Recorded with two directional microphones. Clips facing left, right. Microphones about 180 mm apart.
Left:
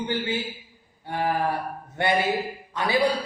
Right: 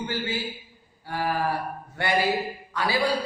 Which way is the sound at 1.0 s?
20° left (ahead or behind).